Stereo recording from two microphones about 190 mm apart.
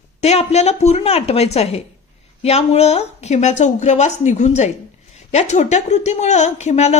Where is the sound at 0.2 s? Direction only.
35° left (ahead or behind).